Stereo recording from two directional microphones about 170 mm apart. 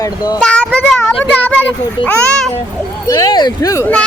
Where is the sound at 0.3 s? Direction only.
5° left (ahead or behind).